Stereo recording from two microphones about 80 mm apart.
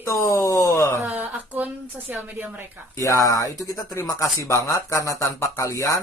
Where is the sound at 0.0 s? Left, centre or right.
Left.